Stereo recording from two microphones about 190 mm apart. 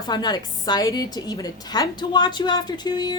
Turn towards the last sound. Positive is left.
turn(degrees=20)  # may be behind; listen again after turning